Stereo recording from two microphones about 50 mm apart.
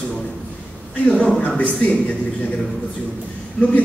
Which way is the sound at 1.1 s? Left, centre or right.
Left.